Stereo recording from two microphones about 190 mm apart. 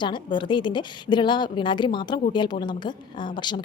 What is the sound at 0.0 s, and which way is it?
A woman's voice, 25° left (ahead or behind).